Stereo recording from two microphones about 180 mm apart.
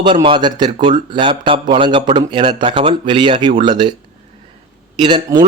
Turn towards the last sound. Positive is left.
turn(degrees=-25)  # may be behind; listen again after turning